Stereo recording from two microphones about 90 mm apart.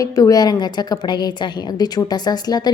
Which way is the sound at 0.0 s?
40° left (ahead or behind).